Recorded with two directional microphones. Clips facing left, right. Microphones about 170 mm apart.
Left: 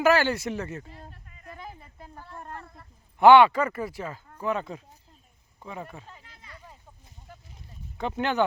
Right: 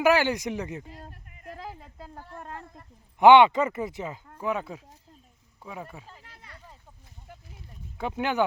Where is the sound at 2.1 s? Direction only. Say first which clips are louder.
Even; 45° right (ahead or behind).